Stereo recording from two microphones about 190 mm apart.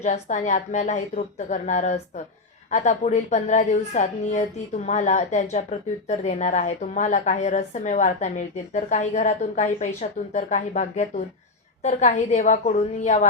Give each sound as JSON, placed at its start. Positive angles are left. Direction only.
{"t": 0.0, "sound": "a woman's voice", "side_deg": 40}